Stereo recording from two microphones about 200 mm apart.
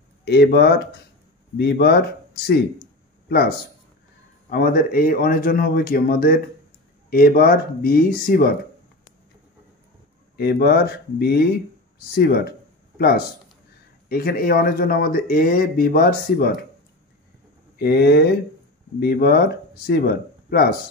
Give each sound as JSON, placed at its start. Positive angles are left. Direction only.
{"t": 0.2, "sound": "speech", "side_deg": 55}
{"t": 10.3, "sound": "speech", "side_deg": 55}
{"t": 17.7, "sound": "speech", "side_deg": 55}